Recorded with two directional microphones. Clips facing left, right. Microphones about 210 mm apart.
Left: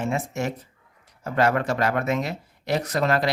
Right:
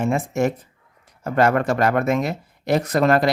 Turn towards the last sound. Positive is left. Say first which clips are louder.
# right 5 dB
turn(degrees=-50)  # may be behind; listen again after turning